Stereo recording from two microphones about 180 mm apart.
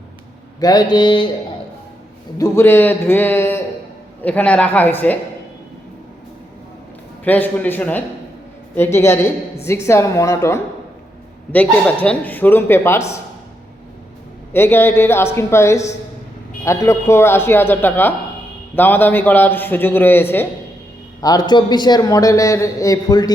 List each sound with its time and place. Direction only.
0.6 s a man's voice: 20° left (ahead or behind)
2.4 s a man's voice: 15° left (ahead or behind)
7.3 s a man's voice: 10° left (ahead or behind)
14.5 s a man's voice: 10° left (ahead or behind)